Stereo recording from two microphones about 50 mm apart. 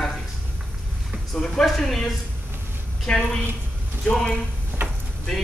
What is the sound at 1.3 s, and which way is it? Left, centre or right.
Speech, centre.